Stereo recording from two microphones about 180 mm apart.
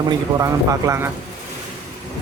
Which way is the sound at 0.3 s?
20° right (ahead or behind).